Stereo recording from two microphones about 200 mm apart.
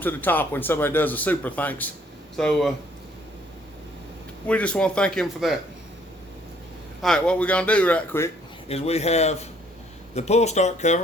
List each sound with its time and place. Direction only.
0.0 s a man's voice: 10° left (ahead or behind)
4.4 s a man's voice: 5° left (ahead or behind)
7.0 s speech: 5° left (ahead or behind)
8.7 s speech: 30° left (ahead or behind)